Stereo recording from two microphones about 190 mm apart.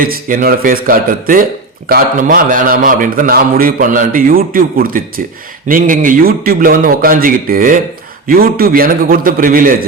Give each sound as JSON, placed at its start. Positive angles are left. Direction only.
{"t": 0.0, "sound": "a man's voice", "side_deg": -45}